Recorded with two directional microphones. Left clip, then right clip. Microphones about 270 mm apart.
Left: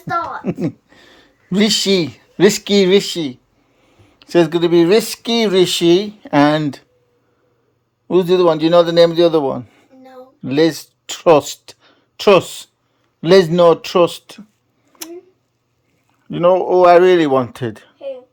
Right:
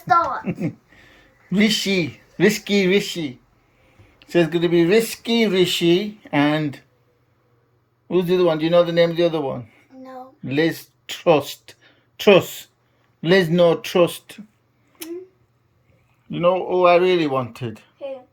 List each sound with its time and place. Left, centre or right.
0.1 s a woman's voice: centre
8.1 s a man's voice: centre
16.3 s speech: centre